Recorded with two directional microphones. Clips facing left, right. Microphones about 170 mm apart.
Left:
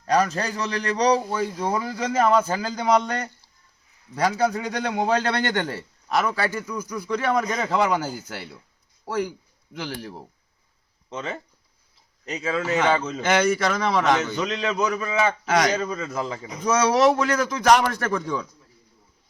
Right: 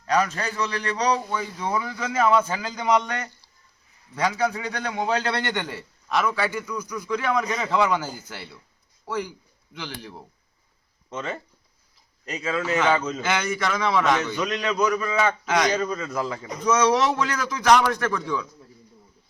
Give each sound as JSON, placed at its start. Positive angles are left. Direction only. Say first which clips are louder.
{"t": 0.1, "sound": "a man's voice", "louder": "left 2 dB", "side_deg": 40}
{"t": 9.7, "sound": "a man's voice", "louder": "left 4 dB", "side_deg": 45}
{"t": 11.1, "sound": "a man's voice", "louder": "even", "side_deg": 20}
{"t": 13.2, "sound": "a man's voice", "louder": "left 5 dB", "side_deg": 40}
{"t": 14.3, "sound": "a man's voice", "louder": "even", "side_deg": 20}
{"t": 16.7, "sound": "a man's voice", "louder": "left 3 dB", "side_deg": 40}